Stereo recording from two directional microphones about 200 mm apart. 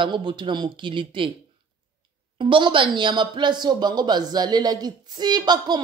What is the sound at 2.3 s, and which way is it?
A man's voice, 25° right (ahead or behind).